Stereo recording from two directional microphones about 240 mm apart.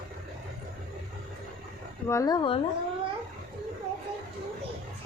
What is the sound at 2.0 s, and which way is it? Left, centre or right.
Speech, centre.